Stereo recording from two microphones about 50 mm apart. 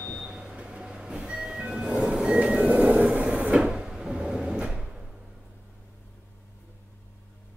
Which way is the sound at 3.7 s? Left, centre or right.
Centre.